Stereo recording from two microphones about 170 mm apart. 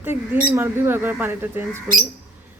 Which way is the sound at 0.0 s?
15° right (ahead or behind).